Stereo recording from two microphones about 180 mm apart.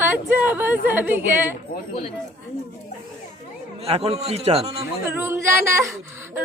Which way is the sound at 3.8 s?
35° right (ahead or behind).